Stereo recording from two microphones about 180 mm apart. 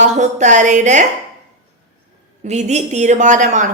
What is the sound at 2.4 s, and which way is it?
A woman's voice, 40° right (ahead or behind).